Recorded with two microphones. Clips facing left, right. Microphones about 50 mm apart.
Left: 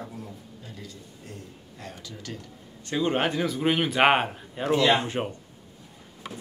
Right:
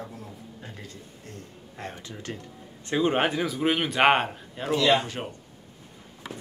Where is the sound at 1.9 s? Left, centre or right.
Right; by 4.7 s centre.